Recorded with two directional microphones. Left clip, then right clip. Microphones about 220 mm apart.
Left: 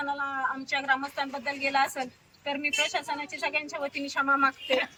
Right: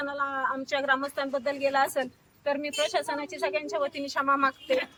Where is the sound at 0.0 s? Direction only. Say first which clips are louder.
Right 1 dB; 20° right (ahead or behind).